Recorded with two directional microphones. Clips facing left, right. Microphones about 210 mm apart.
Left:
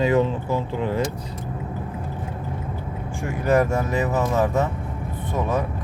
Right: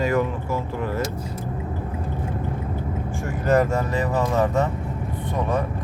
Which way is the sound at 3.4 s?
10° left (ahead or behind).